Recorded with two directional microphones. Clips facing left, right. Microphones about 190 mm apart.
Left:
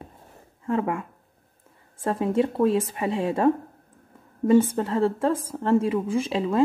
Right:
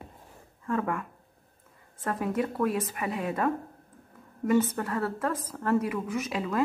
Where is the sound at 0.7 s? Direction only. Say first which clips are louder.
Left 4 dB; 25° left (ahead or behind).